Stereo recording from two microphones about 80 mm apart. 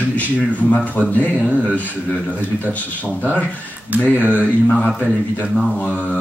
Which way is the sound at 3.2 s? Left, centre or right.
Centre.